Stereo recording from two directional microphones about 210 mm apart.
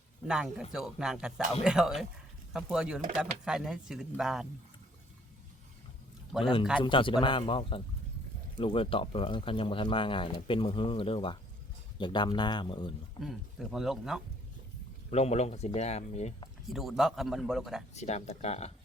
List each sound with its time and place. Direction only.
0.3 s speech: 5° right (ahead or behind)
6.8 s speech: 25° left (ahead or behind)
13.1 s speech: centre (ahead or behind)
15.1 s speech: 30° left (ahead or behind)
16.6 s speech: centre (ahead or behind)
17.9 s speech: 30° left (ahead or behind)